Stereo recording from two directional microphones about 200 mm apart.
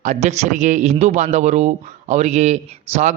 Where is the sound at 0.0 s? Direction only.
35° right (ahead or behind).